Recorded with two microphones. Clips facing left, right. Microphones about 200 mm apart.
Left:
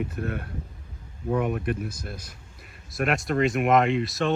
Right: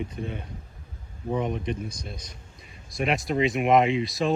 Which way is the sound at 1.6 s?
5° left (ahead or behind).